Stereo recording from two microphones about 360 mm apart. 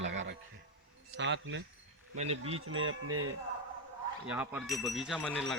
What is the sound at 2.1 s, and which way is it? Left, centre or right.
Speech, centre.